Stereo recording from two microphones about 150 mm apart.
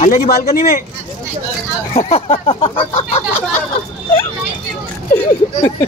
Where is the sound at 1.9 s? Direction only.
40° left (ahead or behind).